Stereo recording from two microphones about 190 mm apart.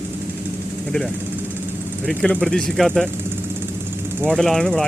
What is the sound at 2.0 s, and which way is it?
Speech, 5° left (ahead or behind).